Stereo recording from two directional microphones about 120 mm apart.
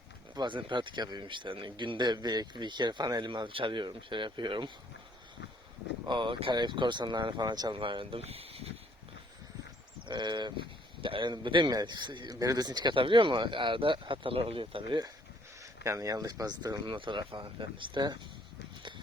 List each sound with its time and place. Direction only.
0.3 s speech: 40° right (ahead or behind)
6.1 s speech: 40° right (ahead or behind)
7.8 s speech: 45° right (ahead or behind)
8.2 s a sound: 55° right (ahead or behind)
10.1 s speech: 40° right (ahead or behind)
15.8 s speech: 25° right (ahead or behind)
18.8 s horse: 40° right (ahead or behind)